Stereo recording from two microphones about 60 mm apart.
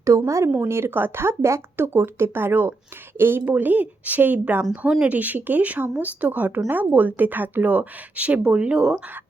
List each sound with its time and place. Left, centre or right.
0.0 s speech: right
0.5 s speech: right
3.4 s a woman's voice: right
4.7 s a woman's voice: centre